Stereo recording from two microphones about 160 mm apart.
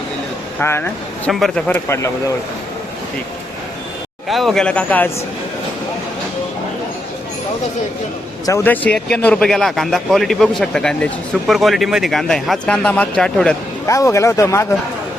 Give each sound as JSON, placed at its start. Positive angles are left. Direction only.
{"t": 0.6, "sound": "speech", "side_deg": 15}
{"t": 1.3, "sound": "speech", "side_deg": 0}
{"t": 4.3, "sound": "speech", "side_deg": 0}
{"t": 8.4, "sound": "a man's voice", "side_deg": 15}
{"t": 13.8, "sound": "speech", "side_deg": 20}